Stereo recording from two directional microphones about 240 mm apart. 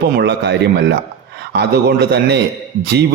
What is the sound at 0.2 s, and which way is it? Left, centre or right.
A man's voice, right.